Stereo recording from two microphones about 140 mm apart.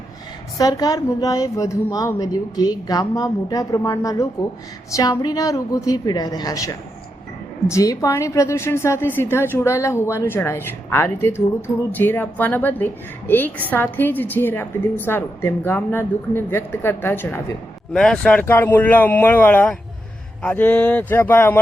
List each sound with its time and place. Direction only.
0.6 s a woman's voice: 25° left (ahead or behind)
17.9 s a woman's voice: 5° left (ahead or behind)